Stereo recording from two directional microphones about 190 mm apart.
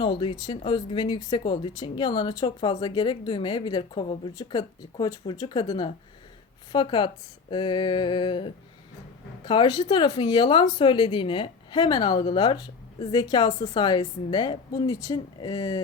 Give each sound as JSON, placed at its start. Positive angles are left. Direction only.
{"t": 0.0, "sound": "speech", "side_deg": 25}